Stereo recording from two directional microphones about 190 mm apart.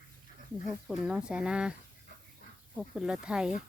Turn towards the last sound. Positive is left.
turn(degrees=-5)  # may be behind; listen again after turning